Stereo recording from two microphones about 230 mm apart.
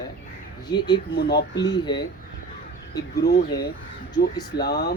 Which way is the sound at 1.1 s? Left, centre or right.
Left.